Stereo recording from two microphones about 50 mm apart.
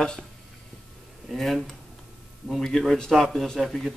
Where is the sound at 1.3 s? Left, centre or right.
Centre.